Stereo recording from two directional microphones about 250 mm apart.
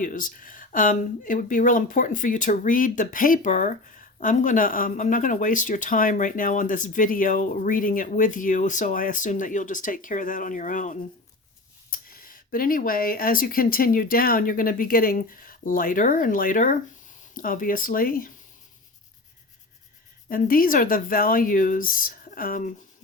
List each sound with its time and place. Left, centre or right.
0.0 s speech: left
20.3 s speech: left